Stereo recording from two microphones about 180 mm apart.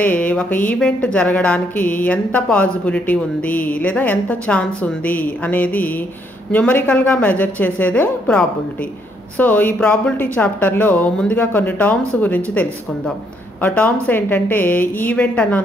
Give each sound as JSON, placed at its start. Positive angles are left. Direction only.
{"t": 0.0, "sound": "a woman's voice", "side_deg": 10}